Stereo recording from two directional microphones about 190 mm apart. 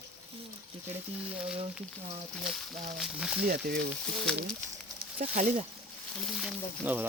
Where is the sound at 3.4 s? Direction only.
55° right (ahead or behind).